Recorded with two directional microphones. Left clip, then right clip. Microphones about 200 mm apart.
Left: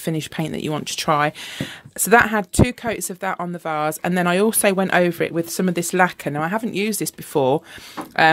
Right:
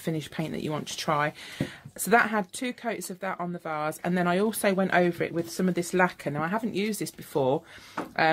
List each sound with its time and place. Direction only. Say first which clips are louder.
0.0 s speech: left 7 dB; 45° left (ahead or behind)